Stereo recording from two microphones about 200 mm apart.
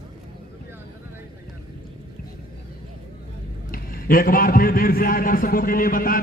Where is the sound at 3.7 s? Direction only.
45° left (ahead or behind).